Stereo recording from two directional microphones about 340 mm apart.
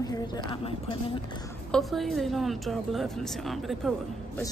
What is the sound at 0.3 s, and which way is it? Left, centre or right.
Speech, centre.